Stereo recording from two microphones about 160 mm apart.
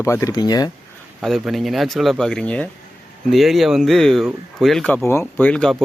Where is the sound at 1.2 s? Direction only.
Centre (ahead or behind).